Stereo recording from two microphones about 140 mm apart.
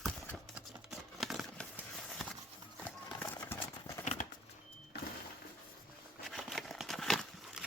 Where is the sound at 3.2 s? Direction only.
15° left (ahead or behind).